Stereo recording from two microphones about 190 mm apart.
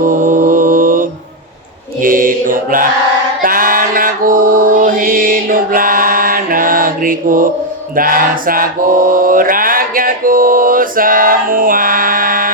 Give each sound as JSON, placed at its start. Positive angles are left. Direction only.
{"t": 0.0, "sound": "mantra", "side_deg": -45}
{"t": 3.4, "sound": "music", "side_deg": -50}
{"t": 7.9, "sound": "mantra", "side_deg": -50}